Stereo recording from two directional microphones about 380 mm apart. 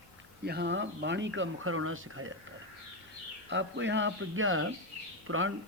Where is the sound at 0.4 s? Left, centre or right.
Right.